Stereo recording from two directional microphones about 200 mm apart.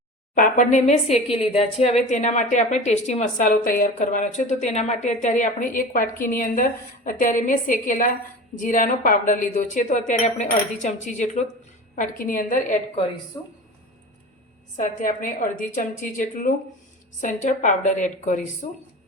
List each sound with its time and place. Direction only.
0.3 s a woman's voice: 40° left (ahead or behind)
13.3 s speech: 20° left (ahead or behind)
14.8 s a woman's voice: 40° left (ahead or behind)